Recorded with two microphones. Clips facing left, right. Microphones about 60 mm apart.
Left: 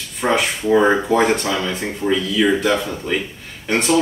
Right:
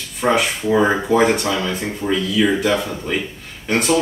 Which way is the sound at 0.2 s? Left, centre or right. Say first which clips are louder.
Right 1 dB; centre.